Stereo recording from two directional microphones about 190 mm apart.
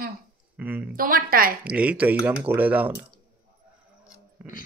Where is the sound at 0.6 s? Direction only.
10° right (ahead or behind).